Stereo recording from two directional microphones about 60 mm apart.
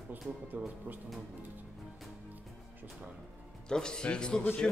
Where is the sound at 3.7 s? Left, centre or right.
Centre.